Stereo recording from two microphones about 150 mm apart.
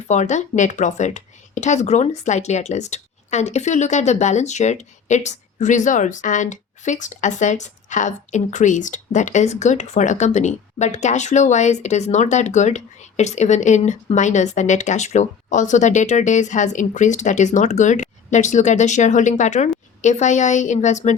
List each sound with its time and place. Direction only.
0.1 s speech: 50° left (ahead or behind)